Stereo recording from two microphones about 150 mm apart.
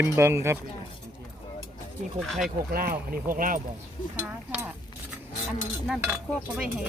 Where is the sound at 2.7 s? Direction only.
75° right (ahead or behind).